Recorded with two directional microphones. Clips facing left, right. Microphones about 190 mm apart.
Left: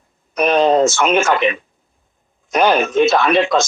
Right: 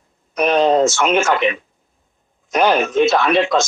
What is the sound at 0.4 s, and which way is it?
Speech, 55° left (ahead or behind).